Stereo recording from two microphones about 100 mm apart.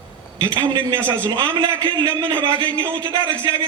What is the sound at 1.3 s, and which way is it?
Speech, 45° right (ahead or behind).